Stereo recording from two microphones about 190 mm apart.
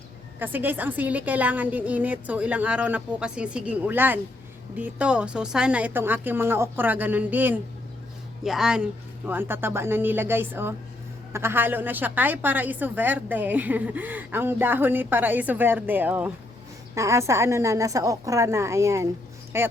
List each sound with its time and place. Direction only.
0.3 s a woman's voice: 10° right (ahead or behind)